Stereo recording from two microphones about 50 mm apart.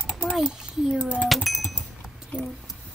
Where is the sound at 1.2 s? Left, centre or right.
Centre.